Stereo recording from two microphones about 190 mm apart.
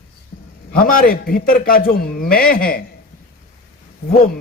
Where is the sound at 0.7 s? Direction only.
50° left (ahead or behind).